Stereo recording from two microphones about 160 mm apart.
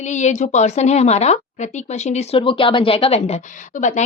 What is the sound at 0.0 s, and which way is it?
A woman's voice, 45° left (ahead or behind).